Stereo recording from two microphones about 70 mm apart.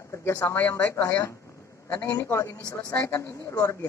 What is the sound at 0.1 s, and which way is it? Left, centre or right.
Speech, left.